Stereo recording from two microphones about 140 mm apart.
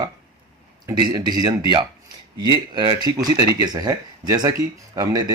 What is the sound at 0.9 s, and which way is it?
A man's voice, 30° right (ahead or behind).